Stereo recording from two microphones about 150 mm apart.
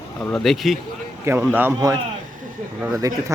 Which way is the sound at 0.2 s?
5° left (ahead or behind).